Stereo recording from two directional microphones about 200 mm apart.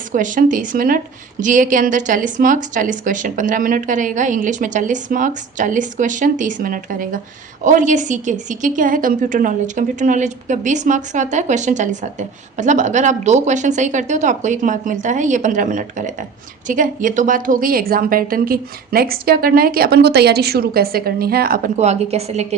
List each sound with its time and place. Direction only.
0.1 s a woman's voice: 40° right (ahead or behind)
21.8 s a woman's voice: 35° right (ahead or behind)